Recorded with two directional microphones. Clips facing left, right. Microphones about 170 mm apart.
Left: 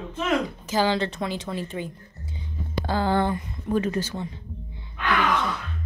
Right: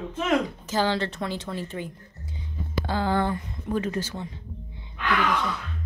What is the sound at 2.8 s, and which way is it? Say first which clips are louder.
Speech: left 2 dB; 35° left (ahead or behind).